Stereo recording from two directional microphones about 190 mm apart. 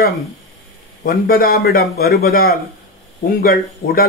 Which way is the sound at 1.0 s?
50° left (ahead or behind).